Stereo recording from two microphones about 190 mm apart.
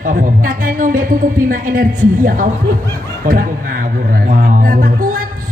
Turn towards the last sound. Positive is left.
turn(degrees=-50)  # may be behind; listen again after turning